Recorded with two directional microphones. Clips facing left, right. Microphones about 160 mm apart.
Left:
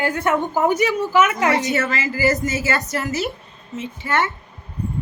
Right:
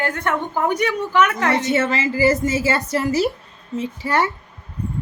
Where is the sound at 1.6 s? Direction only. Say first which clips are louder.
Right 2 dB; 25° right (ahead or behind).